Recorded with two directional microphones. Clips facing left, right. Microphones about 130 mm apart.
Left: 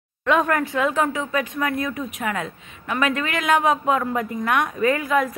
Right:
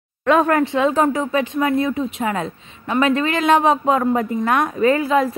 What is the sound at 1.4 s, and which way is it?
A woman's voice, 25° right (ahead or behind).